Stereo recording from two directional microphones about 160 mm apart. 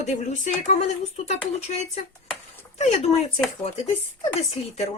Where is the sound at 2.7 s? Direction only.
40° left (ahead or behind).